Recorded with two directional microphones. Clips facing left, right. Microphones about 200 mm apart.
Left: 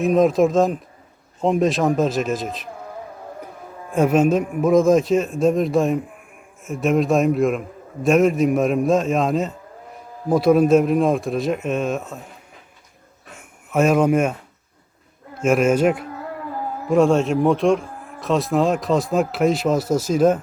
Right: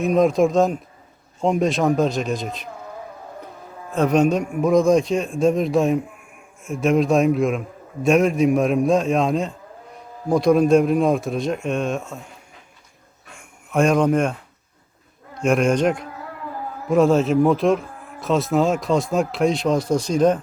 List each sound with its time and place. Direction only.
0.0 s speech: centre (ahead or behind)
3.9 s speech: 5° left (ahead or behind)
13.7 s speech: 5° left (ahead or behind)
15.4 s speech: 5° left (ahead or behind)